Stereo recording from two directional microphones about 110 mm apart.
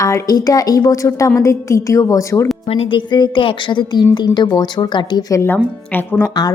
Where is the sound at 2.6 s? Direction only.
60° left (ahead or behind); by 5.2 s 45° left (ahead or behind).